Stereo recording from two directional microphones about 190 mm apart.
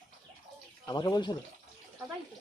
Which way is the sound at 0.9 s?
20° left (ahead or behind).